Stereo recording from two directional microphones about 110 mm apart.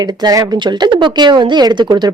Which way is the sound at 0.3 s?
35° right (ahead or behind).